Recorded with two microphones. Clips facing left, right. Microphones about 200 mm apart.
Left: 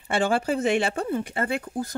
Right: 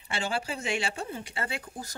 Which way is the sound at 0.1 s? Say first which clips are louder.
Left 9 dB; 50° left (ahead or behind).